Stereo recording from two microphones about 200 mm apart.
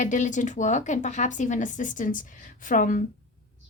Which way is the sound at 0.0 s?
35° left (ahead or behind).